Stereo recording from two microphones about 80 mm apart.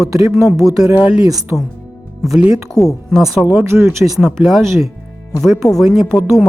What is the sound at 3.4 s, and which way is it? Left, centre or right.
Speech, right.